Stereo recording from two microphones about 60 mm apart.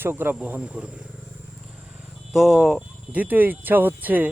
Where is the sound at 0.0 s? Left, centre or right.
Right.